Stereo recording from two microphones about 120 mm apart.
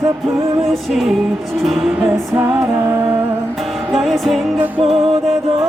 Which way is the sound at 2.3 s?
20° right (ahead or behind).